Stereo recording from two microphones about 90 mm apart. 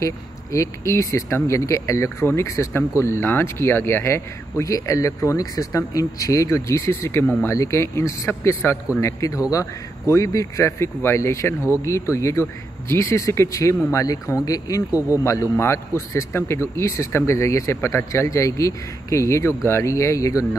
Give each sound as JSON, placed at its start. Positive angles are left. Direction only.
{"t": 0.0, "sound": "speech", "side_deg": 35}
{"t": 9.0, "sound": "speech", "side_deg": 40}
{"t": 15.5, "sound": "speech", "side_deg": 30}